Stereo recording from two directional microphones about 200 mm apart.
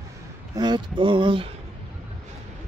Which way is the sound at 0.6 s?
20° right (ahead or behind).